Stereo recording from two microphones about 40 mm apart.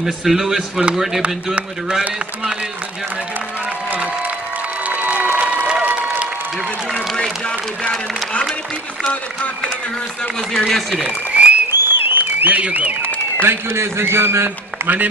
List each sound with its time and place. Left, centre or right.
0.0 s a man's voice: centre
4.8 s crowd: right
5.3 s applause: right
7.2 s speech: left
10.7 s speech: centre
11.1 s applause: right
11.7 s applause: right
12.4 s a man's voice: right
13.4 s a man's voice: right